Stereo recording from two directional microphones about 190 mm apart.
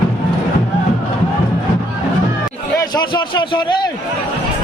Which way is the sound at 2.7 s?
20° left (ahead or behind).